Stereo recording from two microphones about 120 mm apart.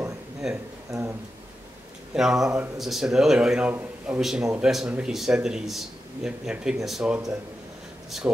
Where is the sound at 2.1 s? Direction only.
5° right (ahead or behind).